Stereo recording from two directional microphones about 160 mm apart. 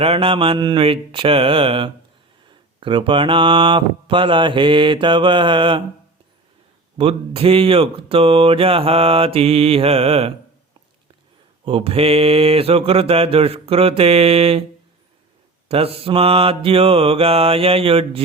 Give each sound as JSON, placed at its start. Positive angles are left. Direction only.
{"t": 0.0, "sound": "speech", "side_deg": -35}
{"t": 6.9, "sound": "speech", "side_deg": -35}
{"t": 11.6, "sound": "speech", "side_deg": -35}
{"t": 15.7, "sound": "speech", "side_deg": -35}